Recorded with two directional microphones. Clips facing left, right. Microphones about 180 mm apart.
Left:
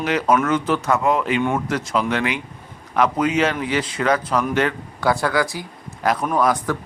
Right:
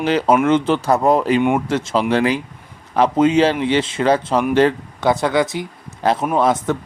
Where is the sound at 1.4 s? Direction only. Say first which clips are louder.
Right 4 dB; 20° right (ahead or behind).